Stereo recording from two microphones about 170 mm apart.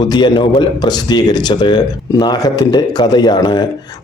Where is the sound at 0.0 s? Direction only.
25° left (ahead or behind).